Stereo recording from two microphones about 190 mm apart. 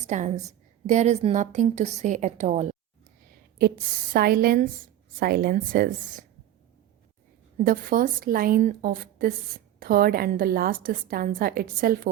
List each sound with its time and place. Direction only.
0.1 s a woman's voice: 40° right (ahead or behind)
4.1 s a woman's voice: 50° right (ahead or behind)
7.6 s a woman's voice: 50° right (ahead or behind)